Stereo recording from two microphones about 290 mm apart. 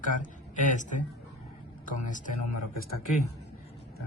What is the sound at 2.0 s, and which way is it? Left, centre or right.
Speech, left.